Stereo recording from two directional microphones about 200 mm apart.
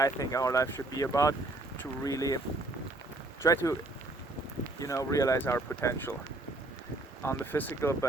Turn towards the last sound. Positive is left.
turn(degrees=10)  # may be behind; listen again after turning